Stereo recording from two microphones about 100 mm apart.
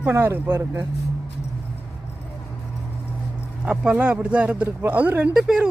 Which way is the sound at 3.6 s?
10° right (ahead or behind).